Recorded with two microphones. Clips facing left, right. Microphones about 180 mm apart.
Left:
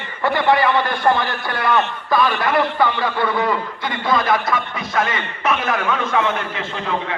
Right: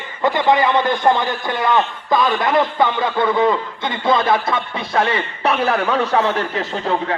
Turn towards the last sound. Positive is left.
turn(degrees=-35)  # may be behind; listen again after turning